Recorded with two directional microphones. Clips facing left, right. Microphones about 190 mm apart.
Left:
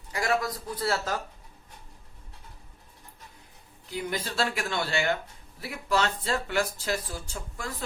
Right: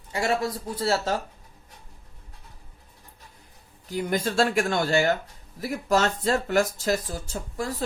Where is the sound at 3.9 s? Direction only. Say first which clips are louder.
Right 6 dB; 45° right (ahead or behind).